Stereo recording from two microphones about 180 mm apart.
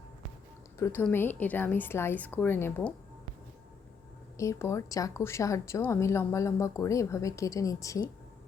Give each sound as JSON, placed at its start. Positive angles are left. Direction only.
{"t": 0.8, "sound": "a woman's voice", "side_deg": 10}
{"t": 4.4, "sound": "a woman's voice", "side_deg": 15}